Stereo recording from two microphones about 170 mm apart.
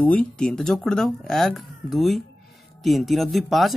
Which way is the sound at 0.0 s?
5° left (ahead or behind).